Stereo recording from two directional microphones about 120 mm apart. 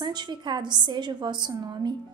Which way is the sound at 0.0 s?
40° right (ahead or behind).